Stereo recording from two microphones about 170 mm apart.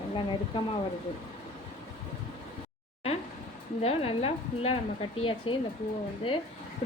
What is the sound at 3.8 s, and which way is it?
A woman's voice, 35° left (ahead or behind).